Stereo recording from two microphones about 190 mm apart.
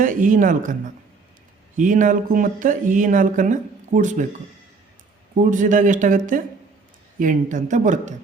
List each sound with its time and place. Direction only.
0.0 s speech: 45° right (ahead or behind)
1.8 s speech: 45° right (ahead or behind)
5.5 s speech: 45° right (ahead or behind)